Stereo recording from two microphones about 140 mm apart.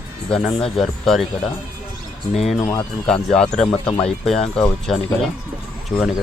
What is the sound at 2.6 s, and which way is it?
Speech, 25° left (ahead or behind).